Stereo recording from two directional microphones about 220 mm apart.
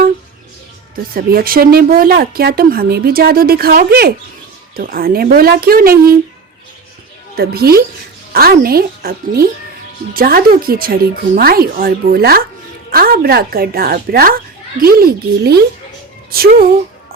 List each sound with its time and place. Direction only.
1.1 s speech: 40° right (ahead or behind)
7.3 s speech: 45° right (ahead or behind)